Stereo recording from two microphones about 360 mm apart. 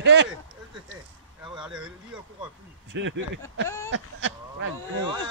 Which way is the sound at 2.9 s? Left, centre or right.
Right.